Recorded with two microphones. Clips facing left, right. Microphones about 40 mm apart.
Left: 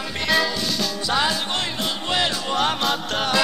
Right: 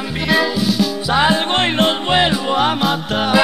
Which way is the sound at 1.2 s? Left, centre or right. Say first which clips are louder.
Right 10 dB; right.